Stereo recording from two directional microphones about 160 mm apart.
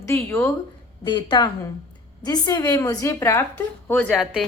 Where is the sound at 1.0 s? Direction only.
30° left (ahead or behind).